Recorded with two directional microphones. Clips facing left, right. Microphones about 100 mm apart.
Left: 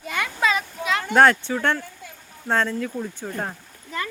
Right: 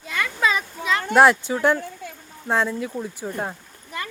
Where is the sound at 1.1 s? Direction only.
10° right (ahead or behind).